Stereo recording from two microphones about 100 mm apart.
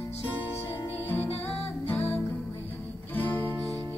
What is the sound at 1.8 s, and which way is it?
Music, 25° left (ahead or behind).